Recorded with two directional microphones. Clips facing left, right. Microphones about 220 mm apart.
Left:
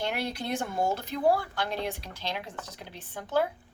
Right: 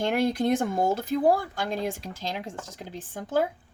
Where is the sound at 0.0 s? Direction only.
50° right (ahead or behind).